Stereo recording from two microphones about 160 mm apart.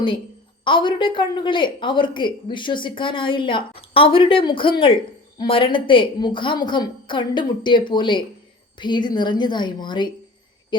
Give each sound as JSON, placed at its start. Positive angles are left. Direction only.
{"t": 0.6, "sound": "a woman's voice", "side_deg": 30}